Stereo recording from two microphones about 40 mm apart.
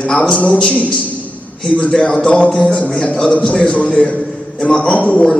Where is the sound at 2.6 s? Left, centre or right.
Left.